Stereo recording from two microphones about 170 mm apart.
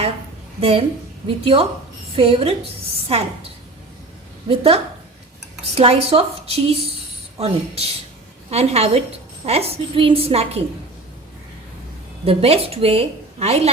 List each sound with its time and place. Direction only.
0.6 s a woman's voice: 35° right (ahead or behind)
4.4 s a woman's voice: 30° right (ahead or behind)
12.2 s a woman's voice: 35° right (ahead or behind)